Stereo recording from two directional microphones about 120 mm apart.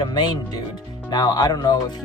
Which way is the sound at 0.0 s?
35° left (ahead or behind).